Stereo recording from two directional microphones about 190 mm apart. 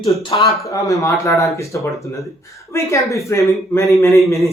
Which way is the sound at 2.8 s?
15° left (ahead or behind).